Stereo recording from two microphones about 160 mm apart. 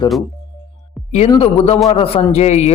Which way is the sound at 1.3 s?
35° left (ahead or behind).